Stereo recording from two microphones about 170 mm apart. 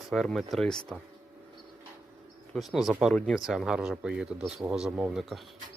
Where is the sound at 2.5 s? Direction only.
Centre (ahead or behind).